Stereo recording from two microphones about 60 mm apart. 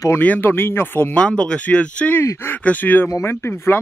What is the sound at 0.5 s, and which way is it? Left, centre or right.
Speech, left.